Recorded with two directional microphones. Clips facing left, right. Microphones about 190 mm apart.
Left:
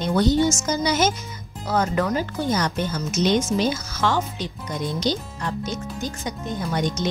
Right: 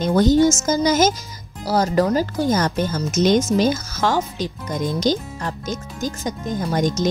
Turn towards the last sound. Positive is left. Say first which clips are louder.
# right 4 dB
turn(degrees=-45)  # may be behind; listen again after turning